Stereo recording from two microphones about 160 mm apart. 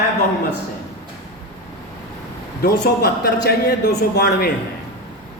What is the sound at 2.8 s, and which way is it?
A man's voice, 85° left.